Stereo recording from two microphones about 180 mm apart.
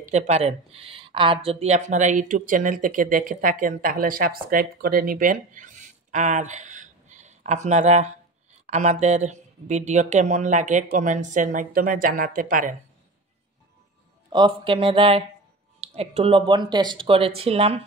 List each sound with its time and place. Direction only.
0.1 s speech: 35° right (ahead or behind)
14.3 s speech: 30° right (ahead or behind)